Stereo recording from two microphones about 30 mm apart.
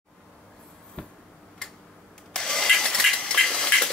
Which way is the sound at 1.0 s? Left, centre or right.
Left.